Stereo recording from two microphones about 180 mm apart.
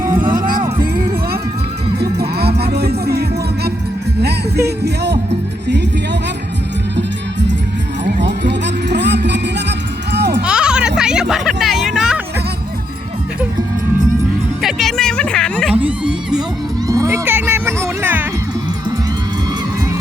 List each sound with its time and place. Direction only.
0.0 s music: 20° right (ahead or behind)
0.3 s music: 50° right (ahead or behind)
2.0 s music: 60° right (ahead or behind)
8.2 s music: 75° right (ahead or behind)
10.4 s a sound: 5° right (ahead or behind)
14.6 s music: centre (ahead or behind)
15.7 s music: 5° right (ahead or behind)
16.9 s cat: 15° right (ahead or behind)